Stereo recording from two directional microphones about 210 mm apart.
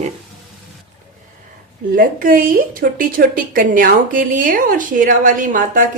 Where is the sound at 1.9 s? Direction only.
40° right (ahead or behind).